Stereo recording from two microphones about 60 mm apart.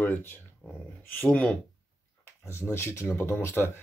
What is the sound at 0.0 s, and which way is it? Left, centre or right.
Speech, left.